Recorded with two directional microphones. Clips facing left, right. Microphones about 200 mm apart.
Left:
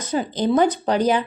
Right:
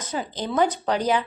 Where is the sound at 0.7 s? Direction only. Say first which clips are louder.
Left 4 dB; 15° left (ahead or behind).